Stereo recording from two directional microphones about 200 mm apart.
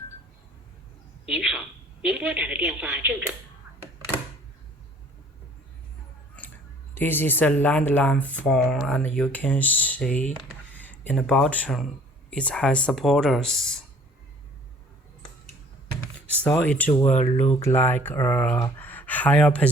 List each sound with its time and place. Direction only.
1.3 s a woman's voice: 5° right (ahead or behind)
6.9 s speech: 10° left (ahead or behind)
16.2 s speech: 5° left (ahead or behind)
16.9 s speech: 35° left (ahead or behind)
17.5 s speech: 10° left (ahead or behind)